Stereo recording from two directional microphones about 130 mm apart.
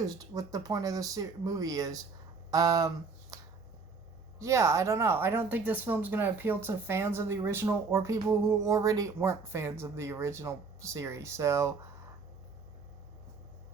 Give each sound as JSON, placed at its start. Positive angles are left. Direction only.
{"t": 0.0, "sound": "speech", "side_deg": -30}